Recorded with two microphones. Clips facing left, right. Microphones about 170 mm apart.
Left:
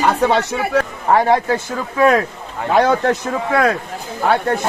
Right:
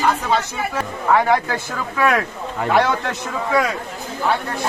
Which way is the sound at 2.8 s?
40° left (ahead or behind).